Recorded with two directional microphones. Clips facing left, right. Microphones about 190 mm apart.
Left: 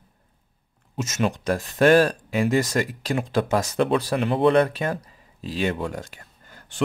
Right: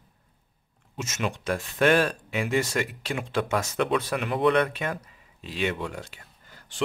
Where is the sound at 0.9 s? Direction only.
40° left (ahead or behind).